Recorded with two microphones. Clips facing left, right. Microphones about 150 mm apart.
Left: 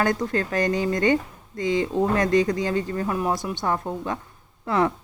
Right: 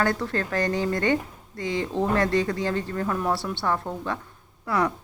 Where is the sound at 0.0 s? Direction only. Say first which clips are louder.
Left 2 dB; 20° left (ahead or behind).